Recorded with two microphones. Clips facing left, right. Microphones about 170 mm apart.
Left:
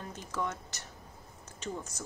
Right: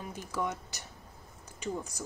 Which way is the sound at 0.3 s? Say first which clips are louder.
Right 1 dB; 10° right (ahead or behind).